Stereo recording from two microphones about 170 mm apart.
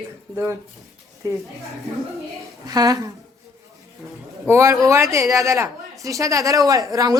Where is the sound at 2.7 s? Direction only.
20° right (ahead or behind).